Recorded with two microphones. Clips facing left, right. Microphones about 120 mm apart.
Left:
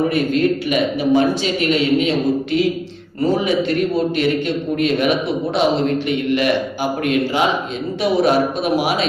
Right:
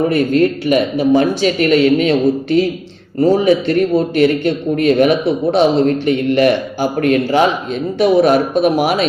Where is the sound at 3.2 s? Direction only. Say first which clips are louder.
Right 5 dB; 45° right (ahead or behind).